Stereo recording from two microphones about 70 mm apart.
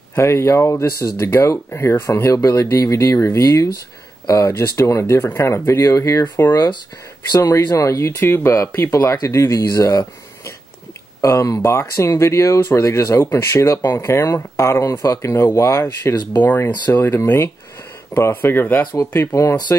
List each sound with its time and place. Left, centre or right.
0.1 s speech: left
2.3 s speech: left
4.3 s speech: left
6.5 s speech: left
7.3 s speech: left
8.2 s speech: left
8.9 s speech: left
11.1 s speech: left
13.8 s speech: left
16.3 s speech: left
19.1 s speech: left